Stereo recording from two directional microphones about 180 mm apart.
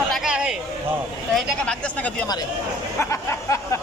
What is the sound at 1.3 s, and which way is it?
Speech, 5° left (ahead or behind).